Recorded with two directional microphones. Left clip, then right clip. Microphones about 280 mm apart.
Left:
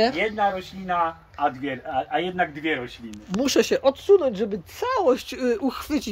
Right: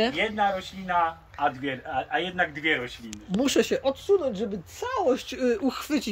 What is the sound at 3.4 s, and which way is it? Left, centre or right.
Speech, centre.